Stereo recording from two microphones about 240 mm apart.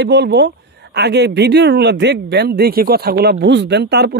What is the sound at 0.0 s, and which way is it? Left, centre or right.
Speech, right.